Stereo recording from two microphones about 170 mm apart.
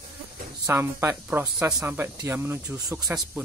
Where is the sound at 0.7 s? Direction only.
10° right (ahead or behind).